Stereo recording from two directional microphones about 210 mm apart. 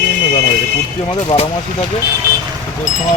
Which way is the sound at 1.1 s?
25° left (ahead or behind).